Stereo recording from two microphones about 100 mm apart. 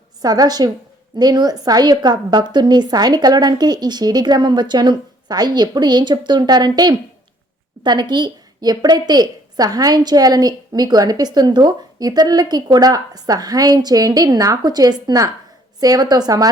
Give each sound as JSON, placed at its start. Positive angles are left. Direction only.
{"t": 0.2, "sound": "a woman's voice", "side_deg": -40}